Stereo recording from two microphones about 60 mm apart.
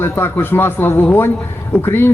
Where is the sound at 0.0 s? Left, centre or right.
Left.